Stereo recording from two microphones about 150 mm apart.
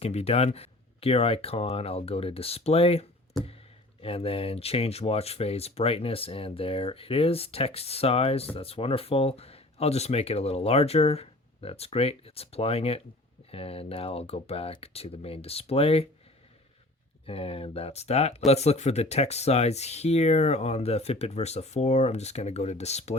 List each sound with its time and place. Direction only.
0.0 s speech: 45° left (ahead or behind)
17.2 s speech: 40° left (ahead or behind)